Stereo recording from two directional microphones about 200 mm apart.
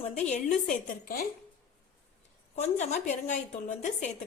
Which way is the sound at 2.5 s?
35° left (ahead or behind).